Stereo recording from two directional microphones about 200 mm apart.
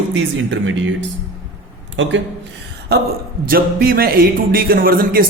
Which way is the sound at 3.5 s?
45° right (ahead or behind).